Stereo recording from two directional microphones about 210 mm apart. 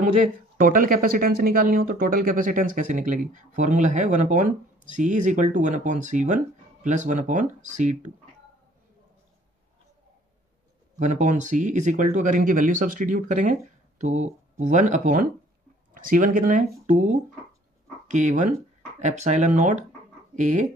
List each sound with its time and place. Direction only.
0.6 s speech: 40° right (ahead or behind)
11.0 s speech: 35° right (ahead or behind)